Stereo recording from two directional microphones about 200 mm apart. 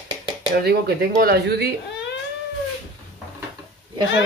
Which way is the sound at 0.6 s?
50° right (ahead or behind).